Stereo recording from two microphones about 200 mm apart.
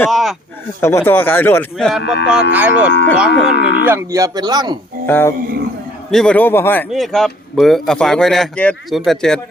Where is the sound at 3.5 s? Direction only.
65° left (ahead or behind).